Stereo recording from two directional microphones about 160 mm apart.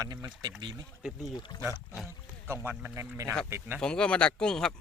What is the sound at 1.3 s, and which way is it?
Speech, 30° left (ahead or behind).